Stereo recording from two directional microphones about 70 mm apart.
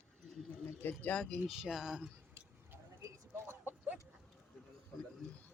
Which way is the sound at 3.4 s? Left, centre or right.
Right.